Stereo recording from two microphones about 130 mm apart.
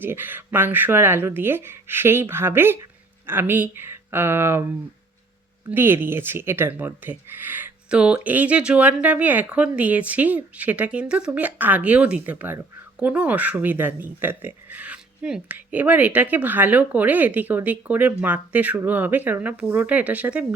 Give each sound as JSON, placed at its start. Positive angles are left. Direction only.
{"t": 0.0, "sound": "speech", "side_deg": -15}